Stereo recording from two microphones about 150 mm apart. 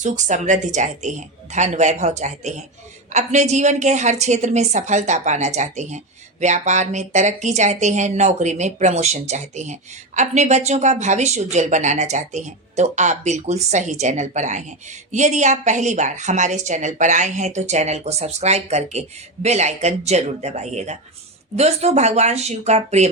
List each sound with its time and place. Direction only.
0.0 s a woman's voice: 55° right (ahead or behind)